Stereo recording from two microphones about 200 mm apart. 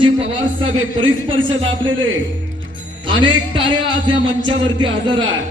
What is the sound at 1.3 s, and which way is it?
Speech, 25° right (ahead or behind).